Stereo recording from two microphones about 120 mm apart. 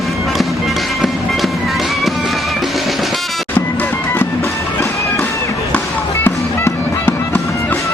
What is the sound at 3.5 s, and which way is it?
Music, 15° left (ahead or behind).